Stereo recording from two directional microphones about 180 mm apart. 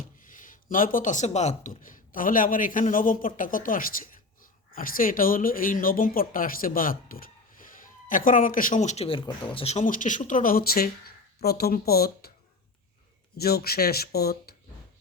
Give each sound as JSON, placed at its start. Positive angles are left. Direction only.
{"t": 0.2, "sound": "speech", "side_deg": 45}
{"t": 13.3, "sound": "speech", "side_deg": 60}